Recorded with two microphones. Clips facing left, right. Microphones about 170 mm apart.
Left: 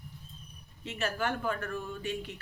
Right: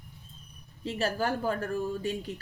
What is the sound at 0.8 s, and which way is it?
Speech, 35° right (ahead or behind).